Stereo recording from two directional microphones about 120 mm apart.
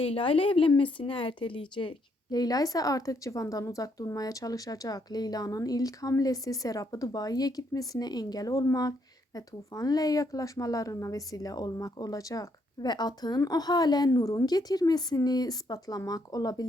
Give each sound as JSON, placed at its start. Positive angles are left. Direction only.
{"t": 0.0, "sound": "a woman's voice", "side_deg": 50}